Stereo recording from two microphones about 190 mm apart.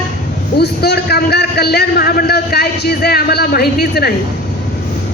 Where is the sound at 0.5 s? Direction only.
60° left (ahead or behind).